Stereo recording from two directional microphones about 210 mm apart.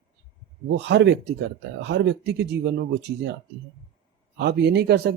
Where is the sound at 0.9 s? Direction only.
55° right (ahead or behind).